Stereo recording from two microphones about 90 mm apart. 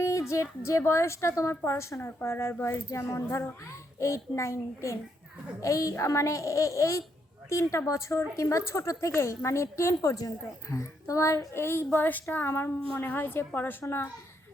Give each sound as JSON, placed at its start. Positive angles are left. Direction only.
{"t": 0.0, "sound": "a woman's voice", "side_deg": 35}